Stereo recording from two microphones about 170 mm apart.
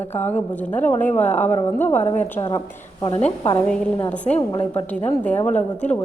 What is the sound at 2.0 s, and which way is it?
A woman's voice, 40° left (ahead or behind).